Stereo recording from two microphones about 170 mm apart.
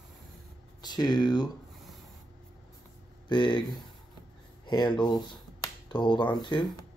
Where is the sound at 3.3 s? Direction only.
30° left (ahead or behind).